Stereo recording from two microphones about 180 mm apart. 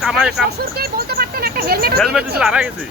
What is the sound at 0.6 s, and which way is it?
Speech, 60° right (ahead or behind).